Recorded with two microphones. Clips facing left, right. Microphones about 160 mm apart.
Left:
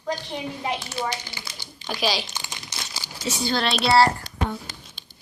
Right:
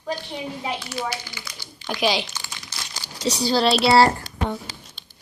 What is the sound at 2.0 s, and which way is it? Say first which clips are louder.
Speech: right 3 dB; 20° right (ahead or behind).